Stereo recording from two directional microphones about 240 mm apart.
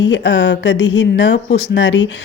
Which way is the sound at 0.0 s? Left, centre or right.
Left.